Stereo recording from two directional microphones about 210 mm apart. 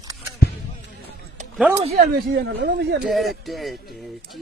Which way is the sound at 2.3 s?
55° right (ahead or behind).